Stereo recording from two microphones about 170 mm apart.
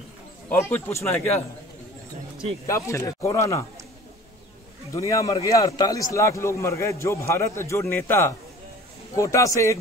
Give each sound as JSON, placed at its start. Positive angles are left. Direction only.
{"t": 0.5, "sound": "a man's voice", "side_deg": 10}
{"t": 2.6, "sound": "a man's voice", "side_deg": 20}
{"t": 4.9, "sound": "a man's voice", "side_deg": 20}